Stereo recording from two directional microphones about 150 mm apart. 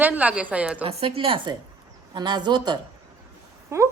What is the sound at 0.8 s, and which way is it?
A woman's voice, 40° right (ahead or behind).